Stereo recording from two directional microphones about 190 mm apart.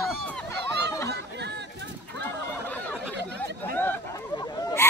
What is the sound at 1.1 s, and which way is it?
Chatter, 65° right (ahead or behind).